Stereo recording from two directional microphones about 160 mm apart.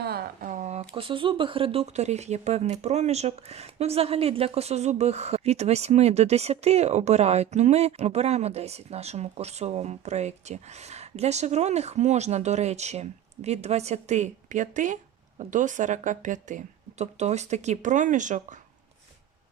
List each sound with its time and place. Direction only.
0.0 s speech: 70° right (ahead or behind); by 18.4 s 50° right (ahead or behind)